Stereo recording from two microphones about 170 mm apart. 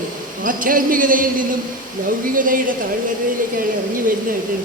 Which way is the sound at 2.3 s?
55° right (ahead or behind).